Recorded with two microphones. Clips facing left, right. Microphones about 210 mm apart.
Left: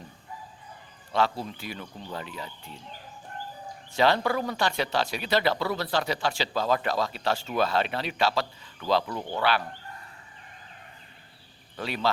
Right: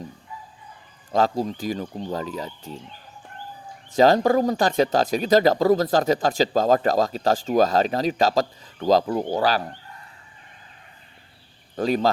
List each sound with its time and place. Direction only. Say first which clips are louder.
1.1 s speech: right 6 dB; 40° right (ahead or behind)
3.9 s speech: right 7 dB; 40° right (ahead or behind)
11.8 s speech: right 8 dB; 40° right (ahead or behind)